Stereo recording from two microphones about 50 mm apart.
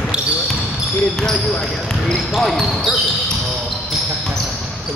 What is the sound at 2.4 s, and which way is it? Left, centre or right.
Speech, centre.